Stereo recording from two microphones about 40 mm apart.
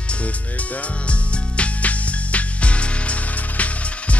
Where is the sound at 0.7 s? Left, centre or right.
Left.